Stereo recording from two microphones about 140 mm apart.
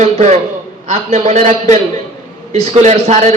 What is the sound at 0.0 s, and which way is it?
A man's voice, 55° right (ahead or behind).